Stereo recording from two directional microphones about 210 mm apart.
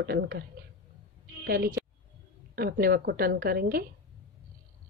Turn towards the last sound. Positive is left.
turn(degrees=-45)  # may be behind; listen again after turning